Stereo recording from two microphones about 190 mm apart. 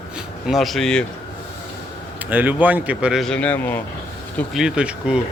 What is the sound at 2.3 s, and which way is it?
Speech, 10° right (ahead or behind).